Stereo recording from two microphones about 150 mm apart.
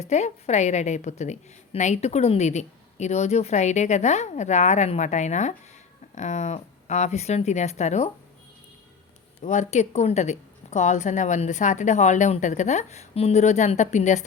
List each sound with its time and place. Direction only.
0.0 s a woman's voice: 45° left (ahead or behind)
9.4 s a woman's voice: 50° left (ahead or behind)